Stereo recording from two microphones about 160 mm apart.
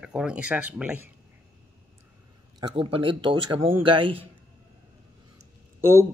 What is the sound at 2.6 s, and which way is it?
A man's voice, 35° right (ahead or behind).